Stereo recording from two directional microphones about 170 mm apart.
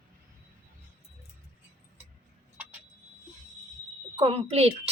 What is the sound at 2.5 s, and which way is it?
Vehicle, 10° right (ahead or behind).